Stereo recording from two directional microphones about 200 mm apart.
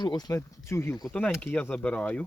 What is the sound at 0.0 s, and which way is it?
Speech, 20° left (ahead or behind).